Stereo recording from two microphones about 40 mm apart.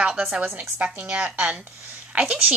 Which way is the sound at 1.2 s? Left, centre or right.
Right.